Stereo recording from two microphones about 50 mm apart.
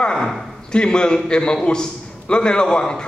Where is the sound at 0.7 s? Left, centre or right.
Centre.